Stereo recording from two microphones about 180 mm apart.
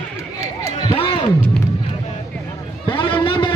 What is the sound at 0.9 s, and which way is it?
Music, 30° left (ahead or behind).